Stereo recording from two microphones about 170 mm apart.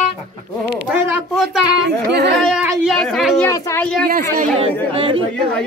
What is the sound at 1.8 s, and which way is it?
Speech, 80° right.